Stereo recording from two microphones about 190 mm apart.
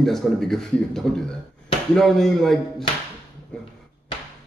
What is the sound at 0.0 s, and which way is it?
A man's voice, centre (ahead or behind).